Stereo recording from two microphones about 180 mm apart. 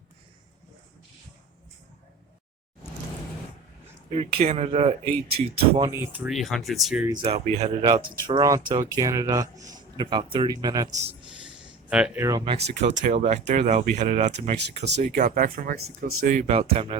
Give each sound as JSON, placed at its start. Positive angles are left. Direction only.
{"t": 4.1, "sound": "speech", "side_deg": -35}
{"t": 5.9, "sound": "speech", "side_deg": -15}
{"t": 6.2, "sound": "speech", "side_deg": 0}
{"t": 7.1, "sound": "speech", "side_deg": -30}
{"t": 7.9, "sound": "speech", "side_deg": -25}
{"t": 10.9, "sound": "a man's voice", "side_deg": -35}
{"t": 11.3, "sound": "a sound", "side_deg": -5}
{"t": 12.2, "sound": "speech", "side_deg": -20}
{"t": 13.0, "sound": "speech", "side_deg": -40}